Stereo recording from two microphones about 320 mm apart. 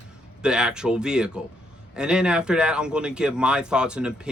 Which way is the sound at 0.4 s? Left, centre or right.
Centre.